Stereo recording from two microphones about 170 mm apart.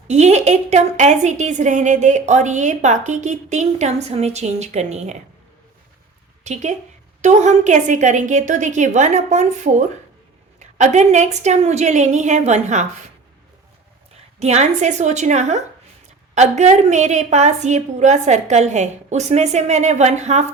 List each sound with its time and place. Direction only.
0.1 s a woman's voice: 40° right (ahead or behind)
6.4 s a woman's voice: 40° right (ahead or behind)
14.3 s a woman's voice: 40° right (ahead or behind)